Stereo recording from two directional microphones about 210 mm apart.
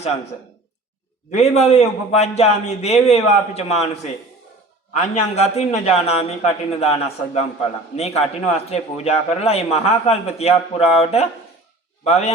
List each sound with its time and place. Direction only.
1.4 s a man's voice: 30° left (ahead or behind)
7.9 s a man's voice: 30° left (ahead or behind)